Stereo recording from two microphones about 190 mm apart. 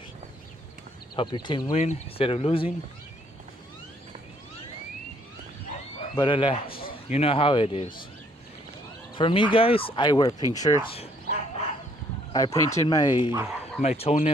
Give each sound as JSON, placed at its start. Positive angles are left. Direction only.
{"t": 1.1, "sound": "speech", "side_deg": 25}
{"t": 6.1, "sound": "a man's voice", "side_deg": 25}
{"t": 9.1, "sound": "speech", "side_deg": 25}
{"t": 10.5, "sound": "bow-wow", "side_deg": 20}
{"t": 12.3, "sound": "speech", "side_deg": 20}
{"t": 13.8, "sound": "speech", "side_deg": 35}